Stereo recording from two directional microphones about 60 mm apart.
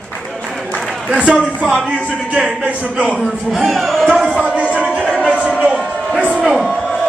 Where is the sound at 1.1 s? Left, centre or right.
Centre.